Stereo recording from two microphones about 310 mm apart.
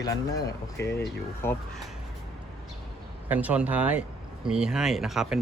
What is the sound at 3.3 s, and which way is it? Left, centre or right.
A man's voice, centre.